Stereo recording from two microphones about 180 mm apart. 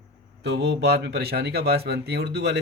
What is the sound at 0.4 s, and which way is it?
Speech, 70° right (ahead or behind).